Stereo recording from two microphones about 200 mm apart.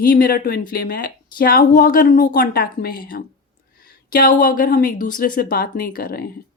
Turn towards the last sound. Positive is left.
turn(degrees=50)  # may be behind; listen again after turning